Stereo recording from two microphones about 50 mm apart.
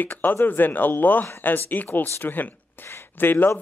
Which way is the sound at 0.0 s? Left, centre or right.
Left.